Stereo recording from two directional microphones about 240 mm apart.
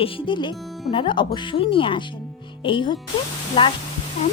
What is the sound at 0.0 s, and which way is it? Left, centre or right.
Speech, centre.